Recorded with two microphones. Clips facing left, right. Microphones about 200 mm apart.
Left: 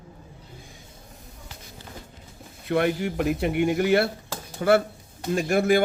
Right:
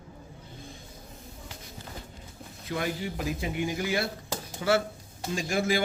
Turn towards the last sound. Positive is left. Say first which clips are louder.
# left 7 dB
turn(degrees=60)  # may be behind; listen again after turning